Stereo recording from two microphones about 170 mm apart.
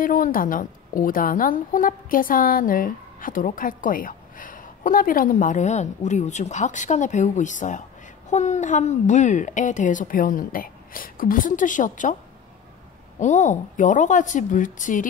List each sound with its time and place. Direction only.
0.0 s a woman's voice: 55° left (ahead or behind)
13.2 s a woman's voice: 45° left (ahead or behind)